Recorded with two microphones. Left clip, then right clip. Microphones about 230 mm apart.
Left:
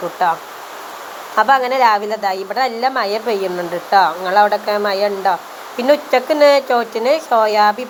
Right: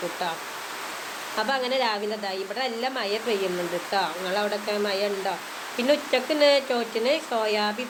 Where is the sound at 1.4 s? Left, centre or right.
Centre.